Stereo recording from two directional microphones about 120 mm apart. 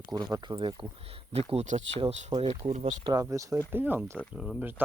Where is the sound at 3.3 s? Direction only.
25° right (ahead or behind).